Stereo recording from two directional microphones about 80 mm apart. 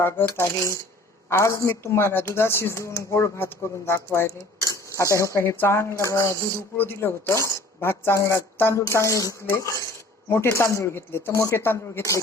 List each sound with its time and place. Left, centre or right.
0.0 s speech: left